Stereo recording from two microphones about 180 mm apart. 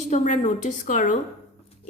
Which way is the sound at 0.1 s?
40° left (ahead or behind).